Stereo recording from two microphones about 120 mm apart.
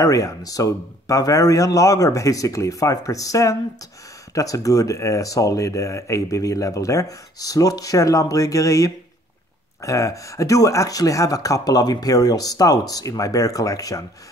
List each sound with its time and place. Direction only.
0.0 s speech: 30° left (ahead or behind)